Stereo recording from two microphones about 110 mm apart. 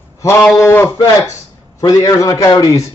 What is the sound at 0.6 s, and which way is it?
Speech, 25° left (ahead or behind).